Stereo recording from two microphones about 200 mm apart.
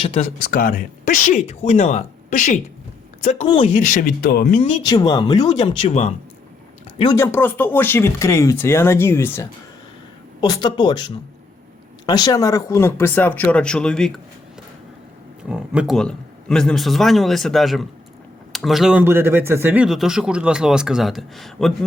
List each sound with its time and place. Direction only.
0.0 s speech: 30° left (ahead or behind)
0.5 s speech: 45° left (ahead or behind)
3.4 s speech: 25° left (ahead or behind)
3.8 s speech: 40° left (ahead or behind)
4.9 s speech: 20° left (ahead or behind)
7.0 s speech: 15° left (ahead or behind)
15.4 s a man's voice: 5° right (ahead or behind)